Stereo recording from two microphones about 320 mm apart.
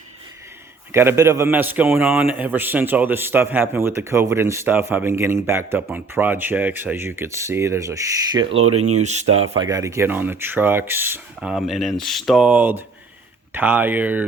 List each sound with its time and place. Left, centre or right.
0.9 s a man's voice: centre
8.4 s speech: right
9.0 s speech: right
9.6 s speech: centre